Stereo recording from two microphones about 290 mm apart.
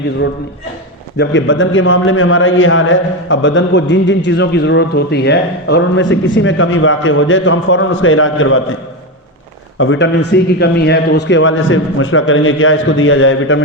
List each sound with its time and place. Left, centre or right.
1.2 s a man's voice: left
9.7 s a man's voice: left